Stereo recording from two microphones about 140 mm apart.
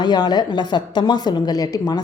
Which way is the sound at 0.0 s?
30° left (ahead or behind).